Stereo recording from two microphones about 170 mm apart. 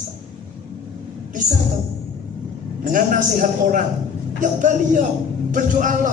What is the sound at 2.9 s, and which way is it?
A man's voice, 50° right (ahead or behind).